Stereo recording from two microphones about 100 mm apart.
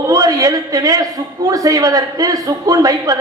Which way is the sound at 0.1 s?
35° right (ahead or behind).